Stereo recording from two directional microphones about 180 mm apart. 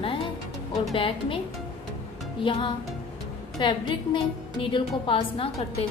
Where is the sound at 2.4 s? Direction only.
30° left (ahead or behind).